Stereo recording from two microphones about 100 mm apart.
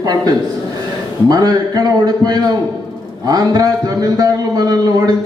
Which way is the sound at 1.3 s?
40° right (ahead or behind).